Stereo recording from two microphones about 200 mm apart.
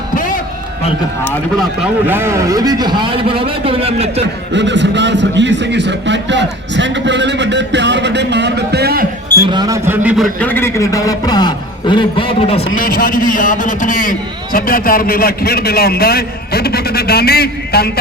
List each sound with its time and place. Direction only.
1.8 s a man's voice: 10° right (ahead or behind); by 4.1 s 30° right (ahead or behind)
4.5 s a man's voice: 60° right (ahead or behind)
9.5 s a man's voice: 20° right (ahead or behind)
10.4 s a man's voice: 10° left (ahead or behind); by 12.6 s 30° left (ahead or behind)
12.7 s a man's voice: 45° left (ahead or behind)